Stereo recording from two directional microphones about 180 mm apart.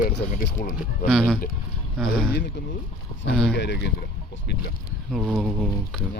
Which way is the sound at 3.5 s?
75° left (ahead or behind).